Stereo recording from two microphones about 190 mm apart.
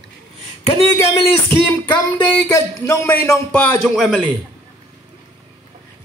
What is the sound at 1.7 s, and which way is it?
A man's voice, 15° left (ahead or behind).